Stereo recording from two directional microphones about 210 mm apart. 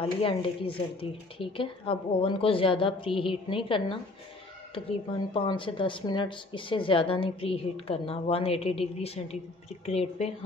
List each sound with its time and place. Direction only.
0.0 s a woman's voice: 25° left (ahead or behind)